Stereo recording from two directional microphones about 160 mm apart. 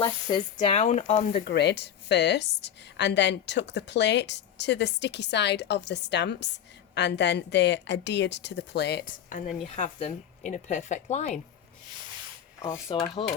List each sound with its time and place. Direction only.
0.0 s speech: 30° left (ahead or behind)
0.5 s speech: 45° left (ahead or behind)
1.3 s a woman's voice: 90° left
9.6 s speech: 50° left (ahead or behind)
12.9 s rub: 35° left (ahead or behind)